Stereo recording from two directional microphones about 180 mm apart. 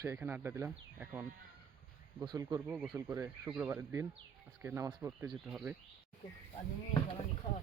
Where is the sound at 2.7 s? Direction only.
5° right (ahead or behind).